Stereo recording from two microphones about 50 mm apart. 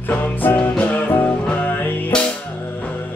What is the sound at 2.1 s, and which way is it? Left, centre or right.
Music, centre.